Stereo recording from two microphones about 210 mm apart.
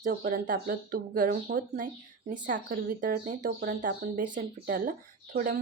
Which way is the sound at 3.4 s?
50° right (ahead or behind).